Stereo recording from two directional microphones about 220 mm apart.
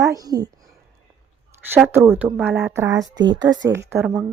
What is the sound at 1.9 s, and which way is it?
A woman's voice, 10° right (ahead or behind).